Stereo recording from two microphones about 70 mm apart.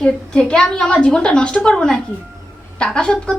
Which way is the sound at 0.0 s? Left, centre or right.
Centre.